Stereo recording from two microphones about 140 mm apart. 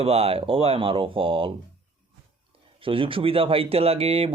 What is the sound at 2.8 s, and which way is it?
Speech, 40° right (ahead or behind).